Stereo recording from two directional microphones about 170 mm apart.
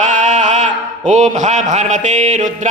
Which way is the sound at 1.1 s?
45° right (ahead or behind).